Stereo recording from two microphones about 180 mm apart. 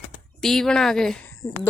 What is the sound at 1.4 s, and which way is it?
Speech, 15° left (ahead or behind).